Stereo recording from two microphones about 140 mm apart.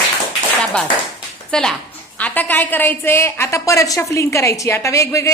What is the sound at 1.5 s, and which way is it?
A woman's voice, 5° left (ahead or behind).